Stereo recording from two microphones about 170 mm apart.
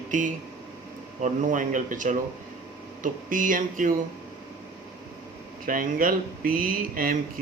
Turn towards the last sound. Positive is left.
turn(degrees=-55)  # may be behind; listen again after turning